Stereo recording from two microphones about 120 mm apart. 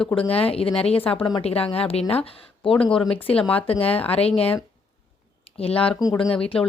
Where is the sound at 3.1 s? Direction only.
50° left (ahead or behind).